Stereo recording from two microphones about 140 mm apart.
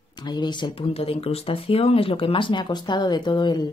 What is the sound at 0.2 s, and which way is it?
Speech, 30° left (ahead or behind).